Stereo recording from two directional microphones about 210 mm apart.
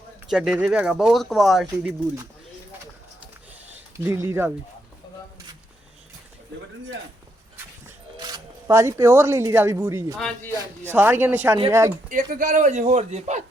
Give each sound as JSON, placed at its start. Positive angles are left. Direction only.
{"t": 0.3, "sound": "speech", "side_deg": 0}
{"t": 3.9, "sound": "speech", "side_deg": -15}
{"t": 7.5, "sound": "zipper", "side_deg": -15}
{"t": 10.2, "sound": "speech", "side_deg": 5}
{"t": 10.9, "sound": "speech", "side_deg": -10}
{"t": 12.0, "sound": "a man's voice", "side_deg": -40}